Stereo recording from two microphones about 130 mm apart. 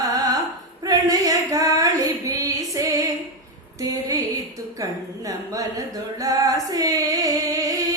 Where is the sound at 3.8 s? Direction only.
25° right (ahead or behind).